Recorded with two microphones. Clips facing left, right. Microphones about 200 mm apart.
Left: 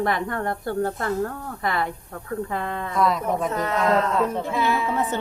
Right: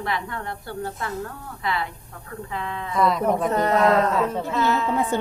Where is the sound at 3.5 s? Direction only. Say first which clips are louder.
Right 5 dB; 35° right (ahead or behind).